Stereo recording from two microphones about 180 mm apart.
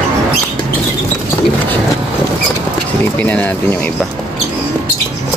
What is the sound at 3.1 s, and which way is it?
Speech, 10° left (ahead or behind).